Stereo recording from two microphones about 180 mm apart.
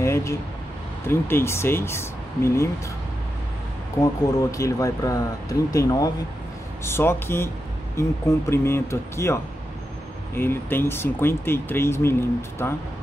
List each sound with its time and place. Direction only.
0.0 s vehicle: 15° left (ahead or behind)
1.0 s speech: 15° left (ahead or behind)
4.0 s speech: 15° left (ahead or behind)